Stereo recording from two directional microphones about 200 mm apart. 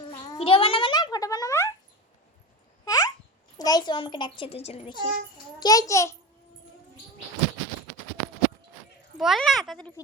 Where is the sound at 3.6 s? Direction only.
20° left (ahead or behind).